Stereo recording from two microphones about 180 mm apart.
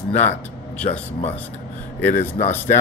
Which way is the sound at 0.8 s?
35° left (ahead or behind).